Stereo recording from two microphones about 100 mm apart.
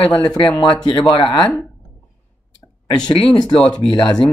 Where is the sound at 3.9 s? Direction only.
55° left (ahead or behind).